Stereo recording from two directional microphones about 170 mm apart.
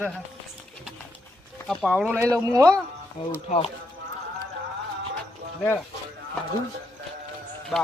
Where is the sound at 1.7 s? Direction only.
Centre (ahead or behind).